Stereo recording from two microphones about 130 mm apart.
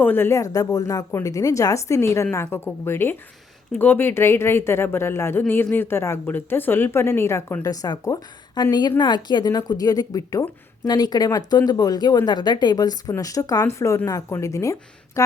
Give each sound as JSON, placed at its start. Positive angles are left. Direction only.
{"t": 0.0, "sound": "speech", "side_deg": 15}